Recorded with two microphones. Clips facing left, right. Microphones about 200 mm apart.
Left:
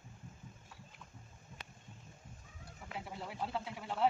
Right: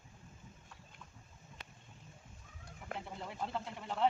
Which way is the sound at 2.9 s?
5° left (ahead or behind).